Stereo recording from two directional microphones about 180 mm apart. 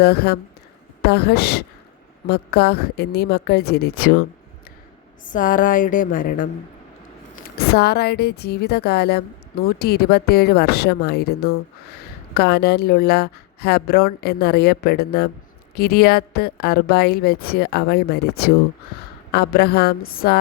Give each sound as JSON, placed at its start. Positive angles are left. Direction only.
{"t": 0.0, "sound": "a woman's voice", "side_deg": 60}
{"t": 5.2, "sound": "speech", "side_deg": 45}
{"t": 7.3, "sound": "a woman's voice", "side_deg": 60}